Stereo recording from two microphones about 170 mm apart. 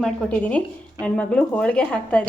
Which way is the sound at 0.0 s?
10° left (ahead or behind).